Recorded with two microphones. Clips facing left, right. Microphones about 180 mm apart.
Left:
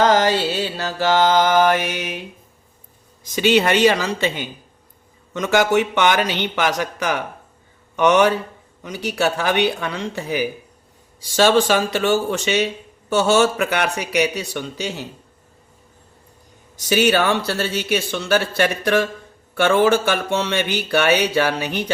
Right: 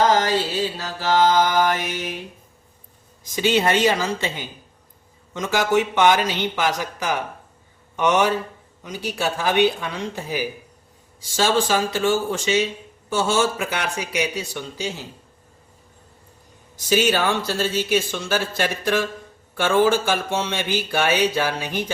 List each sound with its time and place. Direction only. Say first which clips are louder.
0.0 s speech: left 3 dB; 75° left (ahead or behind)
3.3 s speech: left 3 dB; 70° left (ahead or behind)
16.7 s speech: left 3 dB; 70° left (ahead or behind)